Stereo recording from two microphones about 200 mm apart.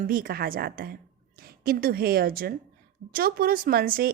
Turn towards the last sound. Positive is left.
turn(degrees=-50)  # may be behind; listen again after turning